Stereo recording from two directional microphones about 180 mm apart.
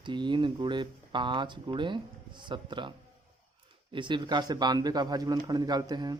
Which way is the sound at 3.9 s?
25° right (ahead or behind).